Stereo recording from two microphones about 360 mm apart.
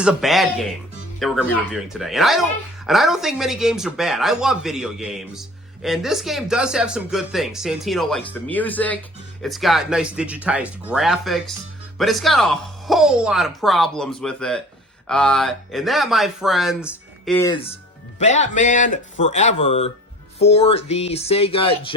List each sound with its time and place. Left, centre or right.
0.0 s speech: centre
18.2 s speech: centre